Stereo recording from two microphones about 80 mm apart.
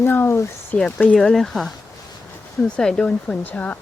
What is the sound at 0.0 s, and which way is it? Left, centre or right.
Speech, left.